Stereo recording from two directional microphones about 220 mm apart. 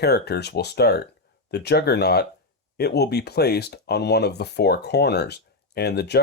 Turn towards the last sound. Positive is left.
turn(degrees=50)  # may be behind; listen again after turning